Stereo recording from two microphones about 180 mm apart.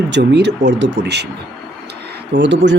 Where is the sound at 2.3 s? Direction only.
80° right.